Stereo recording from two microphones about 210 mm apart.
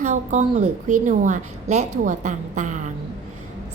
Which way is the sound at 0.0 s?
35° right (ahead or behind).